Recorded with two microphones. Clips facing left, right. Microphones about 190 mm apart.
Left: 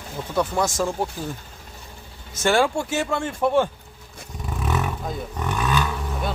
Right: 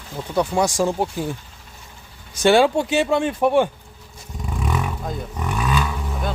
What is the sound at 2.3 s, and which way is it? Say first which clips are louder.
Speech: right 5 dB; 15° right (ahead or behind).